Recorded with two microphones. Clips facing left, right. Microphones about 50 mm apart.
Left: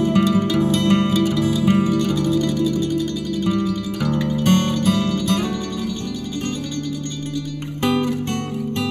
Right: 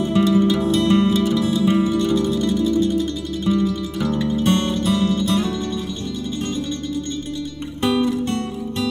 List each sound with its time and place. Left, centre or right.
0.0 s music: left
2.2 s music: right
3.5 s music: left
7.9 s music: left